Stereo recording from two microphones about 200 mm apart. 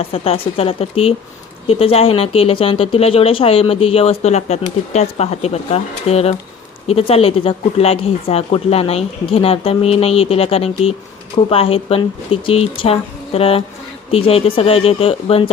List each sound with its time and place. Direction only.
0.0 s speech: 30° left (ahead or behind)